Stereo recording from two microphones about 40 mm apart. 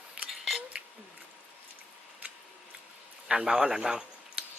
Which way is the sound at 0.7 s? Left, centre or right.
Centre.